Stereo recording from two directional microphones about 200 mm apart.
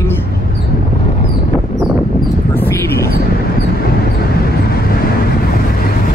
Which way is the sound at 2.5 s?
10° left (ahead or behind).